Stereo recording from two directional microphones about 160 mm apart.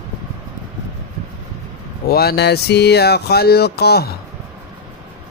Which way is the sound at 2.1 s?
75° left (ahead or behind).